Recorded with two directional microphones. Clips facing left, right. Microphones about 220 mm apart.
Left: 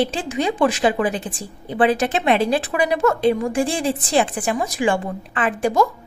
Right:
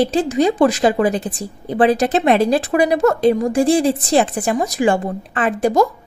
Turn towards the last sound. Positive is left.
turn(degrees=-40)  # may be behind; listen again after turning